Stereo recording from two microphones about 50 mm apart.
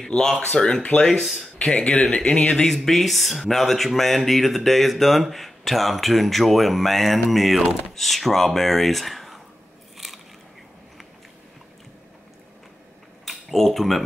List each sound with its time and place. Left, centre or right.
0.0 s speech: centre
1.2 s speech: centre
1.6 s speech: left
2.6 s speech: centre
9.9 s biting: centre
13.2 s a sound: centre